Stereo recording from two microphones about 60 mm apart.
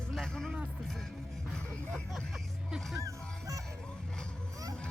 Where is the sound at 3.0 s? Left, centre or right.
Right.